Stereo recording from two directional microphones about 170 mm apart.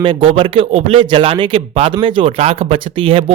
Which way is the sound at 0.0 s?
30° right (ahead or behind).